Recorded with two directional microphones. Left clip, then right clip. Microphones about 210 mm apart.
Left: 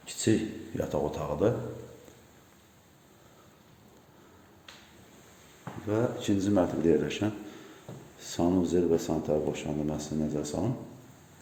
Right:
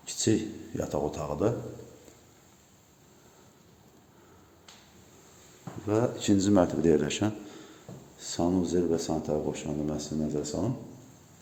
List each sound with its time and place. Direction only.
0.0 s a sound: centre (ahead or behind)
0.8 s speech: 5° right (ahead or behind)
5.9 s a man's voice: 20° right (ahead or behind)
8.2 s speech: centre (ahead or behind)